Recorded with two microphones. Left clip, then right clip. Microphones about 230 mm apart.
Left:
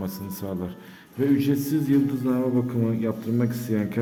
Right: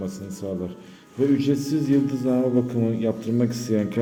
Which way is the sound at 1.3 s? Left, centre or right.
Centre.